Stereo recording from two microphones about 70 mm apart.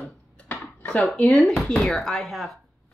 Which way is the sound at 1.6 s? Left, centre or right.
Centre.